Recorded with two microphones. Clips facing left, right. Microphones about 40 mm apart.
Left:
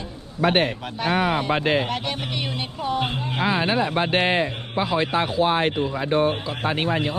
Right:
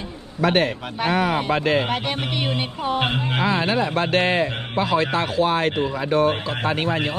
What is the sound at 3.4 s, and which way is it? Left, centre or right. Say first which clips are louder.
Speech: left 1 dB; centre.